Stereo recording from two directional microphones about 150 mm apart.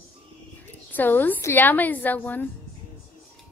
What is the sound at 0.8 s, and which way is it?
A woman's voice, 10° left (ahead or behind).